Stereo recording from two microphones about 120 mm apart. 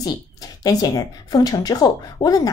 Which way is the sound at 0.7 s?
30° left (ahead or behind).